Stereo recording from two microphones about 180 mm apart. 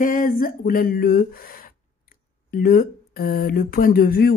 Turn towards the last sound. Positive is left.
turn(degrees=55)  # may be behind; listen again after turning